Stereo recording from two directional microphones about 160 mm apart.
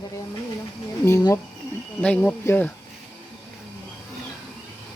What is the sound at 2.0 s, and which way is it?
Speech, 10° left (ahead or behind).